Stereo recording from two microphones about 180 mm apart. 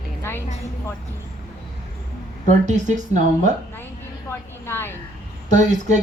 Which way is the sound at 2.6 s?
45° right (ahead or behind).